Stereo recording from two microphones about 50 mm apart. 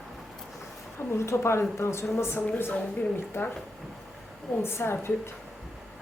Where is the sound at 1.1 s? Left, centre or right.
Left.